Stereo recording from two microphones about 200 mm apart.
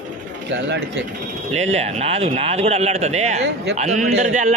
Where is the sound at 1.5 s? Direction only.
35° right (ahead or behind).